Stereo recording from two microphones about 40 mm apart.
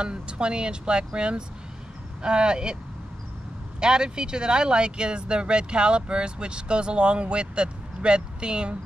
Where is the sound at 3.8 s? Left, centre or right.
Right.